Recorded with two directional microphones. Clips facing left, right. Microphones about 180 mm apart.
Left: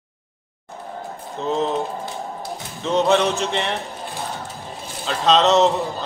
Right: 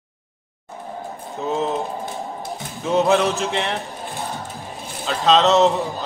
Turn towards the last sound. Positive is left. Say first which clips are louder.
# even
turn(degrees=0)  # may be behind; listen again after turning